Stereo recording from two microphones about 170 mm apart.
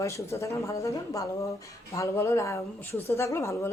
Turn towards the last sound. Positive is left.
turn(degrees=15)  # may be behind; listen again after turning